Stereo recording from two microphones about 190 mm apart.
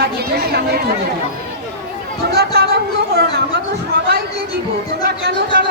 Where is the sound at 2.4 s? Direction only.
55° right (ahead or behind).